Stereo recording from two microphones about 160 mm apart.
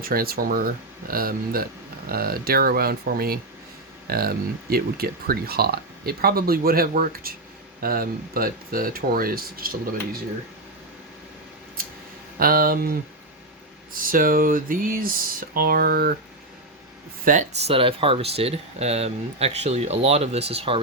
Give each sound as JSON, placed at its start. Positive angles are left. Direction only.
{"t": 0.0, "sound": "speech", "side_deg": -65}
{"t": 12.4, "sound": "speech", "side_deg": -65}
{"t": 17.2, "sound": "speech", "side_deg": -55}
{"t": 17.7, "sound": "speech", "side_deg": -35}